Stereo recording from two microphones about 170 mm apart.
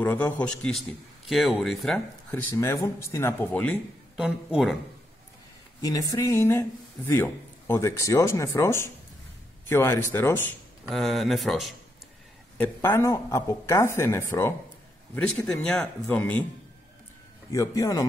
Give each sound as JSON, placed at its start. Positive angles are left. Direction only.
{"t": 0.0, "sound": "a man's voice", "side_deg": 10}
{"t": 2.3, "sound": "speech", "side_deg": 15}
{"t": 4.2, "sound": "a man's voice", "side_deg": 0}
{"t": 5.8, "sound": "speech", "side_deg": 20}
{"t": 10.9, "sound": "a man's voice", "side_deg": 0}
{"t": 12.5, "sound": "a man's voice", "side_deg": 10}
{"t": 17.5, "sound": "speech", "side_deg": 20}